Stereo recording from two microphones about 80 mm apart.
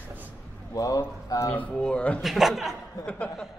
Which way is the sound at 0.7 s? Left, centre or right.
Left.